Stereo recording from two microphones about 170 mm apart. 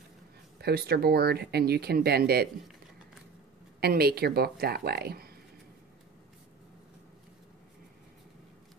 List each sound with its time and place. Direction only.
0.6 s speech: 70° right (ahead or behind)
3.8 s speech: 65° right (ahead or behind)